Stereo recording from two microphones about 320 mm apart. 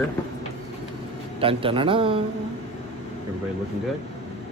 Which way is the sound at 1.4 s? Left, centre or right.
Centre.